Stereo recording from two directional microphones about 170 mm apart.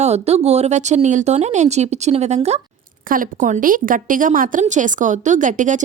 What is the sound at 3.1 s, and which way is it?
Speech, 55° right (ahead or behind).